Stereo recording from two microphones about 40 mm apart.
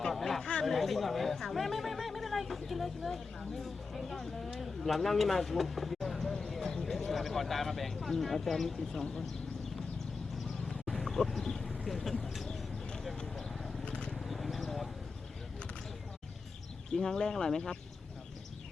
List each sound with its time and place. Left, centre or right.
0.0 s chatter: centre
0.6 s speech: centre
6.5 s clip-clop: centre
6.8 s speech: centre
10.7 s a sound: centre
11.9 s speech: centre
13.4 s a sound: centre
13.8 s vehicle: left
14.3 s a sound: centre
16.9 s speech: centre